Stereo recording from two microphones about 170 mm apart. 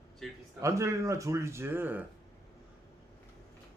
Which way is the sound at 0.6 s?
15° right (ahead or behind).